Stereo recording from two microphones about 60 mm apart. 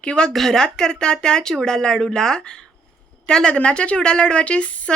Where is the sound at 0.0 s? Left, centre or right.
Centre.